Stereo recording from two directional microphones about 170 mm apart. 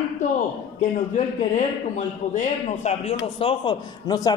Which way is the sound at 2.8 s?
35° left (ahead or behind).